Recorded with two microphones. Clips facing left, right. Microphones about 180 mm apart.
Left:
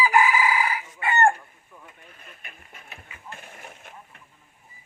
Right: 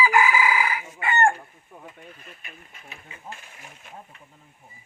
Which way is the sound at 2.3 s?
50° left (ahead or behind).